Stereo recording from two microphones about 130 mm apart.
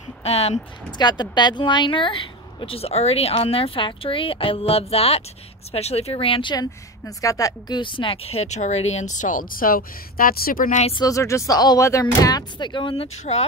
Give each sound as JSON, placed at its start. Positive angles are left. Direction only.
{"t": 0.2, "sound": "speech", "side_deg": 50}
{"t": 0.9, "sound": "speech", "side_deg": 35}
{"t": 7.2, "sound": "speech", "side_deg": 25}
{"t": 11.0, "sound": "speech", "side_deg": 25}
{"t": 13.2, "sound": "speech", "side_deg": 60}